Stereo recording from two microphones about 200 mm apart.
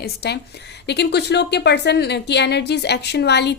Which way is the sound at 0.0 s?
55° left (ahead or behind).